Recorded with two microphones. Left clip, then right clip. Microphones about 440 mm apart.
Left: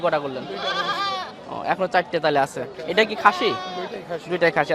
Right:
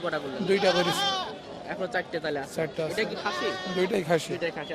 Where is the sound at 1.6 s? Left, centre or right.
Left.